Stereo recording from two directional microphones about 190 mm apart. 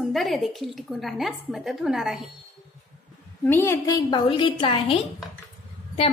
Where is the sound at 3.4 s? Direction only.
10° left (ahead or behind).